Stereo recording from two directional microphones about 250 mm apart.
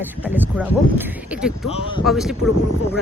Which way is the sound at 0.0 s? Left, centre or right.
Centre.